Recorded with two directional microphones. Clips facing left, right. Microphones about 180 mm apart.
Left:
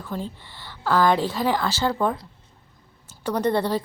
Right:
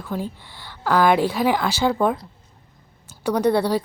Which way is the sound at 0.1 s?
10° right (ahead or behind).